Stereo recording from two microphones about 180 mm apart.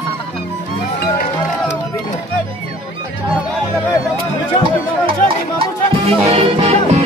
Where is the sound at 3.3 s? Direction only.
Centre (ahead or behind).